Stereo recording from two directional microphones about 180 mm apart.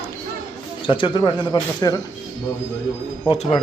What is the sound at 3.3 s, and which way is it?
Speech, 35° left (ahead or behind).